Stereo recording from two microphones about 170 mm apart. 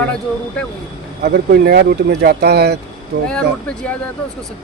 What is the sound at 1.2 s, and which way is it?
Speech, 65° right (ahead or behind).